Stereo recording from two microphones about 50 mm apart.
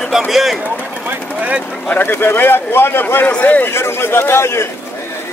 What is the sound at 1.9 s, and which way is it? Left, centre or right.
Speech, left.